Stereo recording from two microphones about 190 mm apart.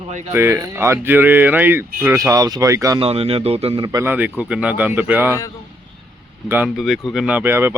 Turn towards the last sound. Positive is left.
turn(degrees=-10)  # may be behind; listen again after turning